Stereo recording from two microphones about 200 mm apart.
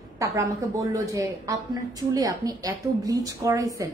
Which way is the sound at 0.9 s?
15° right (ahead or behind).